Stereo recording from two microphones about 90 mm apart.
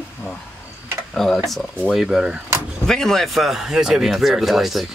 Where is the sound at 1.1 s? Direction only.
Centre (ahead or behind).